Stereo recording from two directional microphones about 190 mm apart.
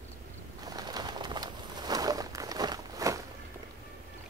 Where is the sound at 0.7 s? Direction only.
20° right (ahead or behind).